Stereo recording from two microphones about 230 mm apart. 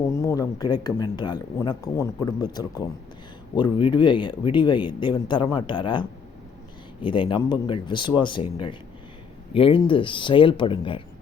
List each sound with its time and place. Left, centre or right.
0.1 s speech: centre